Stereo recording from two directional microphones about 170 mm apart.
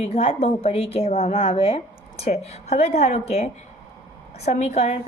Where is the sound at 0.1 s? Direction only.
35° left (ahead or behind).